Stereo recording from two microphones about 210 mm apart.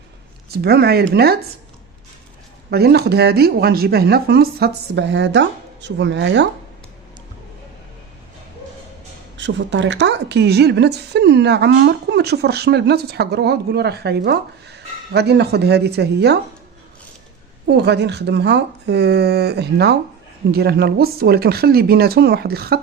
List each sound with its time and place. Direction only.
0.5 s a woman's voice: 50° right (ahead or behind)
2.6 s a woman's voice: 50° right (ahead or behind)
9.4 s a woman's voice: 60° right (ahead or behind)
17.7 s a woman's voice: 55° right (ahead or behind)